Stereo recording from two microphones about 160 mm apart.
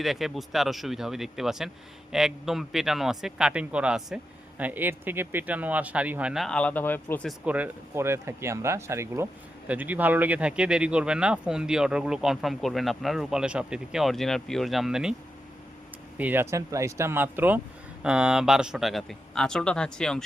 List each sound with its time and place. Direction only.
0.0 s speech: centre (ahead or behind)
7.3 s speech: 10° right (ahead or behind)
16.1 s speech: 10° right (ahead or behind)